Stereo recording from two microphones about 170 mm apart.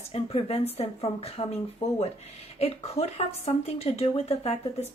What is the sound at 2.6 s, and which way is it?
Speech, 35° left (ahead or behind).